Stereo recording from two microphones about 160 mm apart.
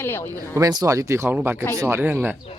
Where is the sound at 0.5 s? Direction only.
20° right (ahead or behind).